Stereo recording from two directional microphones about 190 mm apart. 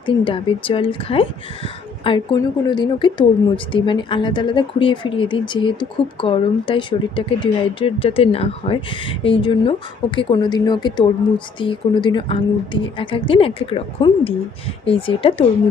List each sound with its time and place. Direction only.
0.0 s speech: 25° left (ahead or behind)